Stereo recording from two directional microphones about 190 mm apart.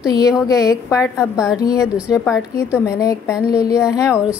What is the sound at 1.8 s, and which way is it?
Speech, 5° right (ahead or behind).